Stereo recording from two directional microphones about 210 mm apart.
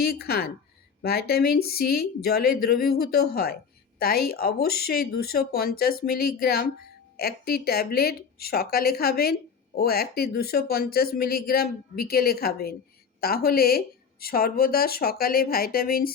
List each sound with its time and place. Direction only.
0.0 s speech: 50° left (ahead or behind)